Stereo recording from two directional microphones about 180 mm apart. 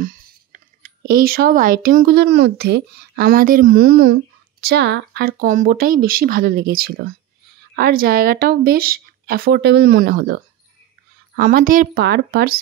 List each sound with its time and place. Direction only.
1.0 s speech: 55° right (ahead or behind)
2.0 s a woman's voice: 70° right (ahead or behind)